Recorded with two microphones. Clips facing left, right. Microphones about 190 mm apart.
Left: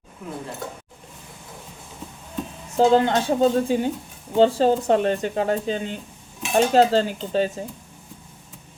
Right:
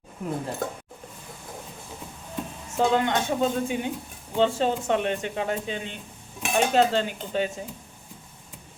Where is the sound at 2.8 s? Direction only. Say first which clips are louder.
Left 5 dB; 35° left (ahead or behind).